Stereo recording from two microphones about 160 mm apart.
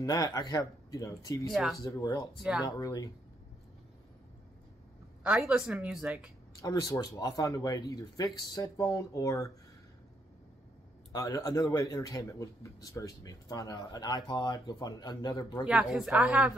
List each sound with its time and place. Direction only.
0.0 s a man's voice: 20° left (ahead or behind)
1.5 s speech: centre (ahead or behind)
1.8 s a man's voice: 20° left (ahead or behind)
5.2 s a woman's voice: 5° right (ahead or behind)
6.5 s a man's voice: 20° left (ahead or behind)
11.1 s a man's voice: 20° left (ahead or behind)
15.6 s speech: 5° right (ahead or behind)